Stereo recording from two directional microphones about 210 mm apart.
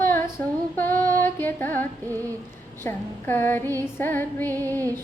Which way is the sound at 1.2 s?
10° left (ahead or behind).